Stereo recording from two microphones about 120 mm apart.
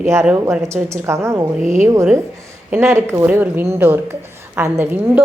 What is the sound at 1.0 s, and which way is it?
A woman's voice, 25° right (ahead or behind).